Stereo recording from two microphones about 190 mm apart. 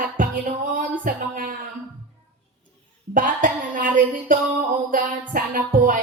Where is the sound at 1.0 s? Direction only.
45° right (ahead or behind).